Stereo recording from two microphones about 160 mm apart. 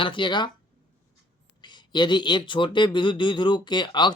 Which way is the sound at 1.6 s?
30° left (ahead or behind).